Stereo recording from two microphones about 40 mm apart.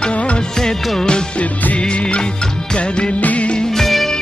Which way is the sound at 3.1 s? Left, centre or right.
Left.